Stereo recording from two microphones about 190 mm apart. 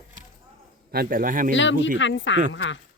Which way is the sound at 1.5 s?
75° left (ahead or behind).